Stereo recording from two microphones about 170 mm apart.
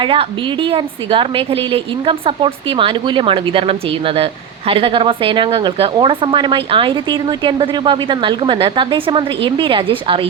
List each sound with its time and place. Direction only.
0.0 s a woman's voice: 30° right (ahead or behind)